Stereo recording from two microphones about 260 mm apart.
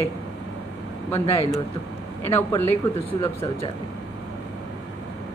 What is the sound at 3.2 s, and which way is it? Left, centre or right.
Speech, left.